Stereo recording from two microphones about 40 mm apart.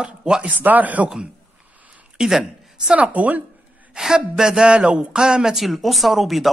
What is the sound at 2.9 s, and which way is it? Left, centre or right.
Speech, right.